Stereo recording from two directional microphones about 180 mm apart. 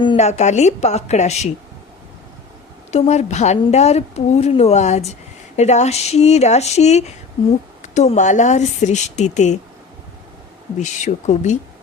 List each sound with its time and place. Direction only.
0.0 s a sound: 25° left (ahead or behind)
0.3 s a woman's voice: 40° left (ahead or behind)
2.9 s a woman's voice: 40° left (ahead or behind)
10.8 s a woman's voice: 40° left (ahead or behind)